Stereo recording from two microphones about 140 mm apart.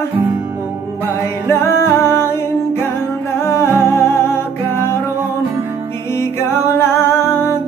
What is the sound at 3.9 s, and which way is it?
Music, 20° left (ahead or behind).